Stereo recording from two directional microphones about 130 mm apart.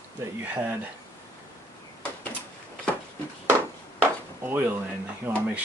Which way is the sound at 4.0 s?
15° right (ahead or behind).